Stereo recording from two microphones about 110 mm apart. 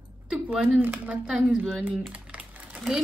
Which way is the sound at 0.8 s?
15° right (ahead or behind).